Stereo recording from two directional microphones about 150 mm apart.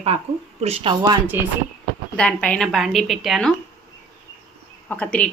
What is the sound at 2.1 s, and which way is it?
A woman's voice, 10° left (ahead or behind).